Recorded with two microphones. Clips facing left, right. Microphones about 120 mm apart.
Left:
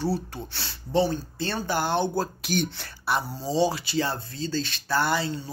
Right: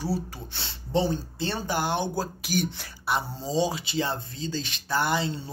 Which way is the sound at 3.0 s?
20° right (ahead or behind).